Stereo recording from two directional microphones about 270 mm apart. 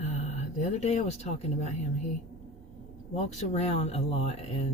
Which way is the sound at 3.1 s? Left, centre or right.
Left.